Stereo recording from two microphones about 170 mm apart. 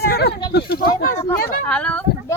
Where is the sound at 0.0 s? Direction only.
65° left (ahead or behind).